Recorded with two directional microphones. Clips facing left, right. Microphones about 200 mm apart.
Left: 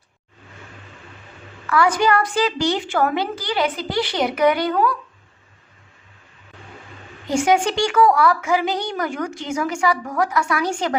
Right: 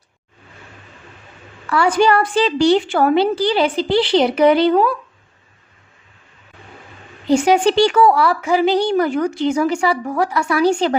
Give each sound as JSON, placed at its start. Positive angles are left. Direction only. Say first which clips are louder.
{"t": 1.6, "sound": "a woman's voice", "louder": "right 3 dB", "side_deg": -30}
{"t": 7.3, "sound": "speech", "louder": "right 5 dB", "side_deg": -35}